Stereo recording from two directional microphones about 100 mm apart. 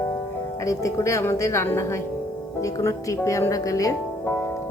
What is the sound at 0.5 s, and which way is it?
Speech, 30° left (ahead or behind).